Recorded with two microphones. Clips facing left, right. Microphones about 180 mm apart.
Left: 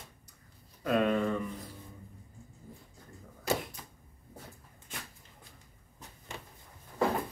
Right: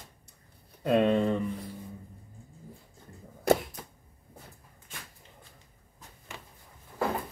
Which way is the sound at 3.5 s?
60° right (ahead or behind).